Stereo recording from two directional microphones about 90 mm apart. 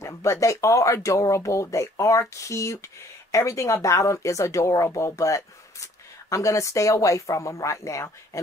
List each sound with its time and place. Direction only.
0.0 s speech: 35° left (ahead or behind)